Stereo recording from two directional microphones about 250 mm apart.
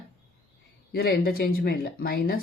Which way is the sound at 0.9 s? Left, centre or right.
Left.